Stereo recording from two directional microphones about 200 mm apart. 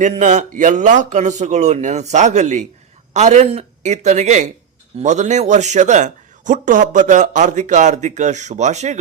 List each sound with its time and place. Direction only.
0.0 s speech: 35° right (ahead or behind)